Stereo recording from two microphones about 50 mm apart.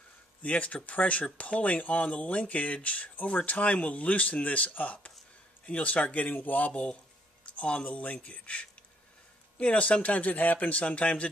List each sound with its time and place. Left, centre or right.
0.4 s speech: left
7.4 s speech: left